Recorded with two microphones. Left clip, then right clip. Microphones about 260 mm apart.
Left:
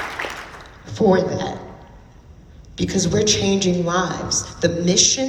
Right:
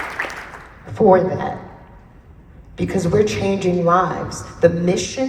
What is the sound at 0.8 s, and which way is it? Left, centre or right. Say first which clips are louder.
Speech: right 4 dB; right.